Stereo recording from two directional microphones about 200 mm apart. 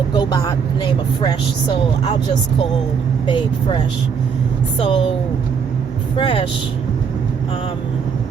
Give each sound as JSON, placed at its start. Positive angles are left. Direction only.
{"t": 0.1, "sound": "speech", "side_deg": 20}
{"t": 3.2, "sound": "speech", "side_deg": 25}
{"t": 4.8, "sound": "speech", "side_deg": 25}
{"t": 6.1, "sound": "speech", "side_deg": 25}